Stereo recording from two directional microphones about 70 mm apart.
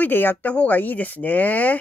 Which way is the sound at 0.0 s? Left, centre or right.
Left.